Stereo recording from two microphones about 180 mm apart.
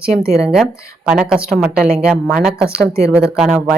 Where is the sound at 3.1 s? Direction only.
5° right (ahead or behind).